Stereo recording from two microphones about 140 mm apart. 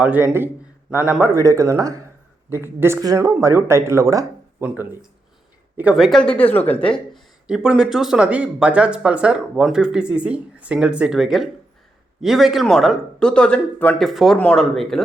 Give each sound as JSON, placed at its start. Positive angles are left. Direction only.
{"t": 0.0, "sound": "speech", "side_deg": -10}
{"t": 7.4, "sound": "speech", "side_deg": -5}
{"t": 14.0, "sound": "speech", "side_deg": 0}